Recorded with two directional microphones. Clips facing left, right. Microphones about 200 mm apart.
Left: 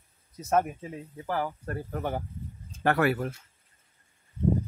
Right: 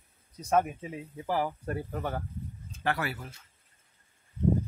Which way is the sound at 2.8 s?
55° left (ahead or behind).